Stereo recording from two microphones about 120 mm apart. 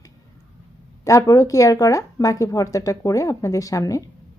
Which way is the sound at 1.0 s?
25° left (ahead or behind).